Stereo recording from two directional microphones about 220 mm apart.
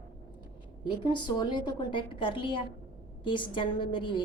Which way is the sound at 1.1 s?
20° left (ahead or behind).